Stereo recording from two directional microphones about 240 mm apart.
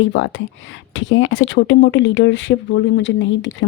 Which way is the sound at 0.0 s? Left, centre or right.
Left.